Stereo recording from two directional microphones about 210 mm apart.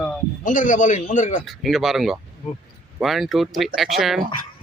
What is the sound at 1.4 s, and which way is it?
Speech, centre (ahead or behind).